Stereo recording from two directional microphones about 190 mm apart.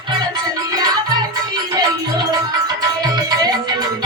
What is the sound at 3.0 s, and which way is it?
Music, 20° right (ahead or behind).